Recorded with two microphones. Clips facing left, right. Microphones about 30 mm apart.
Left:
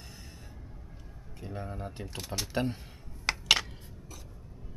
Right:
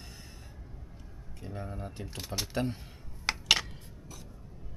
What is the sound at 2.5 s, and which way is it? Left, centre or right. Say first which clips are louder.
Speech: left 2 dB; centre.